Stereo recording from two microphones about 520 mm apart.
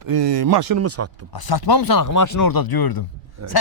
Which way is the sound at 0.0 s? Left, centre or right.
Right.